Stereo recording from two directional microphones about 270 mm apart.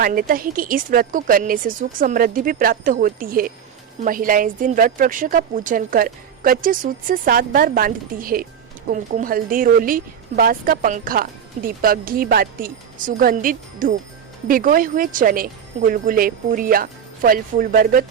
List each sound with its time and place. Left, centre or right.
0.0 s a woman's voice: right